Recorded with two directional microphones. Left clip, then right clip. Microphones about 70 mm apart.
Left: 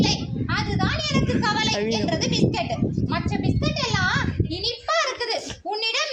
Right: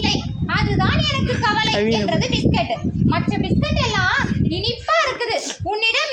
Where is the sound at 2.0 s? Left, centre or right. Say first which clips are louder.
Right 3 dB; left.